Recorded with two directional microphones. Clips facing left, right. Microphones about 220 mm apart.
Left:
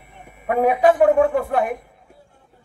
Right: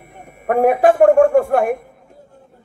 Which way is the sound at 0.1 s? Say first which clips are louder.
Right 4 dB; 45° right (ahead or behind).